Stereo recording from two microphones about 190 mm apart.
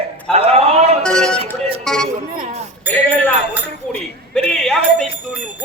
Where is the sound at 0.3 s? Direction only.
30° right (ahead or behind).